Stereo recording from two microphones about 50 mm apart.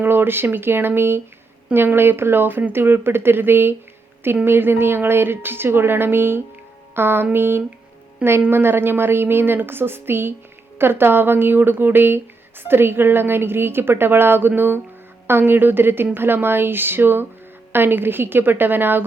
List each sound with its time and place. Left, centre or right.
0.0 s a woman's voice: right